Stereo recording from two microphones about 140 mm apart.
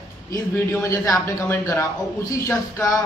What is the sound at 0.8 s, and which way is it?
A man's voice, 20° left (ahead or behind).